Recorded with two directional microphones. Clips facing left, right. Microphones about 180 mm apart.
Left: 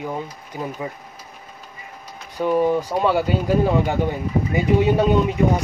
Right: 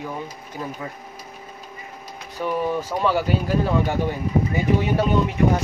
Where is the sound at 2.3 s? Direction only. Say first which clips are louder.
Left 5 dB; 20° left (ahead or behind).